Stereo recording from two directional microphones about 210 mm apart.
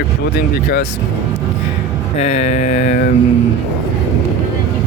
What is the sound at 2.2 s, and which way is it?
Speech, 35° left (ahead or behind).